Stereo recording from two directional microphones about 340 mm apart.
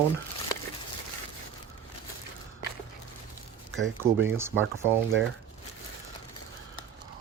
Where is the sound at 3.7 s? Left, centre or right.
Right.